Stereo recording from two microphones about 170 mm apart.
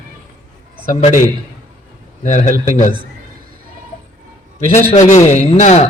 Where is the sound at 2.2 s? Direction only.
50° left (ahead or behind).